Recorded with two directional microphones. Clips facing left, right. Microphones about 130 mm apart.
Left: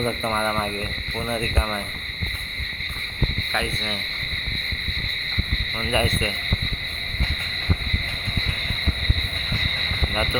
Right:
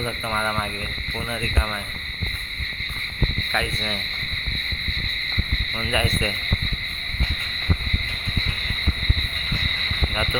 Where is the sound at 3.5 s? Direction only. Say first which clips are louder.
Right 1 dB; 15° left (ahead or behind).